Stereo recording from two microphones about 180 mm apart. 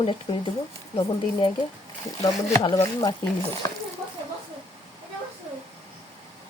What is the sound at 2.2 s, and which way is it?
Speech, 20° left (ahead or behind).